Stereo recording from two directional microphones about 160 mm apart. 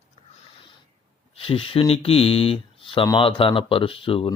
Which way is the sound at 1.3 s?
35° left (ahead or behind).